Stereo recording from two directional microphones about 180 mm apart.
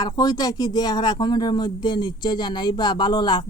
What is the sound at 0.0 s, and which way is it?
Speech, 20° left (ahead or behind).